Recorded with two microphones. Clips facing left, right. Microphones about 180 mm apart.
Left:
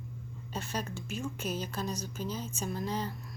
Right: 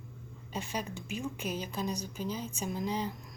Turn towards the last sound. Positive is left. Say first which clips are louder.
# right 1 dB
turn(degrees=-15)  # may be behind; listen again after turning